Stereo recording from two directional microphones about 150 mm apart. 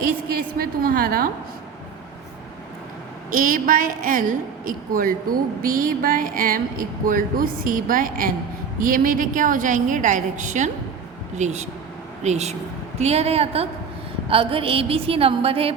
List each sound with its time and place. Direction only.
0.3 s a woman's voice: 75° right (ahead or behind)
3.3 s a woman's voice: 65° right (ahead or behind); by 15.7 s 40° right (ahead or behind)